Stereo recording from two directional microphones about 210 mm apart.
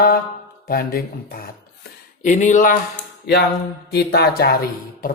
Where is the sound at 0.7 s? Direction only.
45° left (ahead or behind).